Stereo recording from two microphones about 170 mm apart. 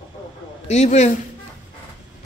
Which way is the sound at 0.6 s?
40° left (ahead or behind).